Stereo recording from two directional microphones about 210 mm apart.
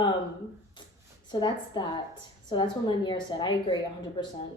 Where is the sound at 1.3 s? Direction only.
20° left (ahead or behind).